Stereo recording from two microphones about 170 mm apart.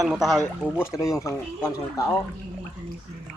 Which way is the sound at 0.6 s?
10° left (ahead or behind).